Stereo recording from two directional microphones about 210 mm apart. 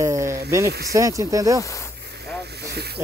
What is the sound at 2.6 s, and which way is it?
Vehicle, 50° right (ahead or behind).